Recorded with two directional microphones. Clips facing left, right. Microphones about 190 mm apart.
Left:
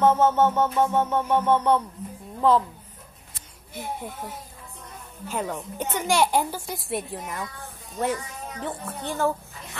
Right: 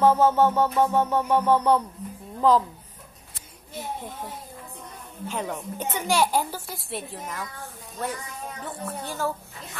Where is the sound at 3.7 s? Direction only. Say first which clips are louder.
Left 1 dB; 10° left (ahead or behind).